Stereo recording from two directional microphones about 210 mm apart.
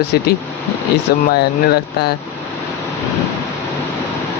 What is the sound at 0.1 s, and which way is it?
Mantra, 50° left (ahead or behind).